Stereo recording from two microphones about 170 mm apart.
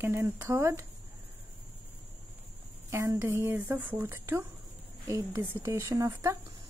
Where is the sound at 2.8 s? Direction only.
15° right (ahead or behind).